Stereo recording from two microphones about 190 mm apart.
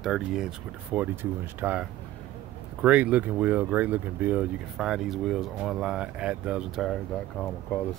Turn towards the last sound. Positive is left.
turn(degrees=10)  # may be behind; listen again after turning